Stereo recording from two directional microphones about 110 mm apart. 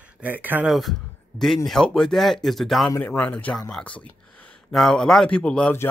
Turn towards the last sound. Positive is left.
turn(degrees=10)  # may be behind; listen again after turning